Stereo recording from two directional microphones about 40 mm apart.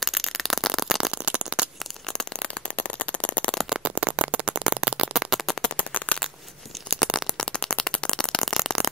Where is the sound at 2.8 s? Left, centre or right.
Left.